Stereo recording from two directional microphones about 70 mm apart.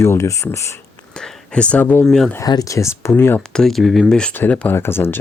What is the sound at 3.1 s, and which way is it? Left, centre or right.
Speech, left.